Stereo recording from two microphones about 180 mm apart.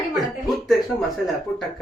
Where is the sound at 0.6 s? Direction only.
Centre (ahead or behind).